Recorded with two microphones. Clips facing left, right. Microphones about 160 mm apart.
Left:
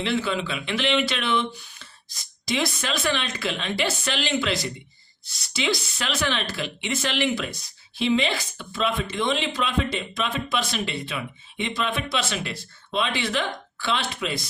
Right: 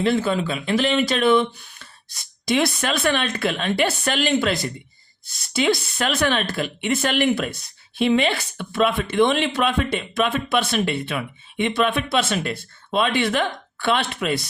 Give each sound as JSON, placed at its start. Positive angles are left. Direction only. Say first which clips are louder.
{"t": 0.0, "sound": "speech", "louder": "right 5 dB", "side_deg": -45}